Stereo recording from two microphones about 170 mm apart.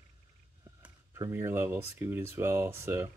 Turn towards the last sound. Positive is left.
turn(degrees=-15)  # may be behind; listen again after turning